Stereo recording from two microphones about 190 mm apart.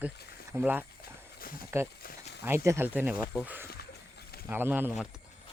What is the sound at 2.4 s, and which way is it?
Speech, 15° right (ahead or behind).